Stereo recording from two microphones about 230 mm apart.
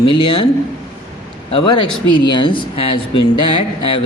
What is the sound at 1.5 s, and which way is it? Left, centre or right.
Speech, centre.